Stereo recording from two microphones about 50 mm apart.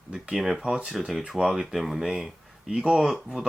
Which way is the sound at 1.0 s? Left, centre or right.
Centre.